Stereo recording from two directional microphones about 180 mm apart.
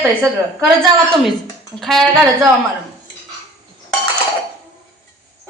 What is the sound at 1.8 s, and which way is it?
Speech, centre (ahead or behind).